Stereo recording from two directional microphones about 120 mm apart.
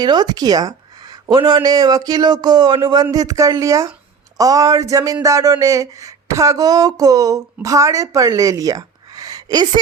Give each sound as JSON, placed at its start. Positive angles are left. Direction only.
{"t": 0.0, "sound": "a woman's voice", "side_deg": -35}